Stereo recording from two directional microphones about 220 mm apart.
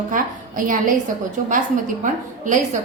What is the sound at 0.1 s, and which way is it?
A woman's voice, 40° right (ahead or behind).